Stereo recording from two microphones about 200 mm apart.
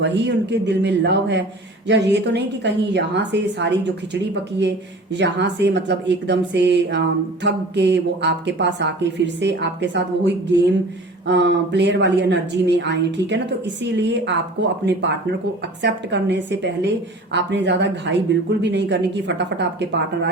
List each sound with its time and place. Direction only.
0.0 s speech: 60° right (ahead or behind)